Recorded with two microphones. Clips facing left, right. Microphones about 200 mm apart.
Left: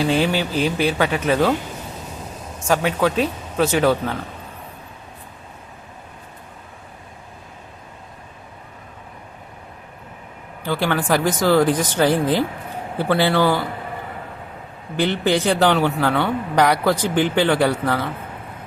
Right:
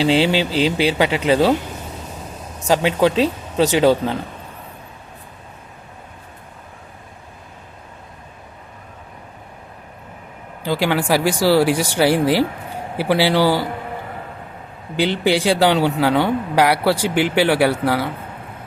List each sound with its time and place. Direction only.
0.0 s speech: 90° right
0.9 s speech: 15° right (ahead or behind)
2.6 s speech: 25° right (ahead or behind)
10.6 s speech: 15° right (ahead or behind)
14.9 s speech: 10° right (ahead or behind)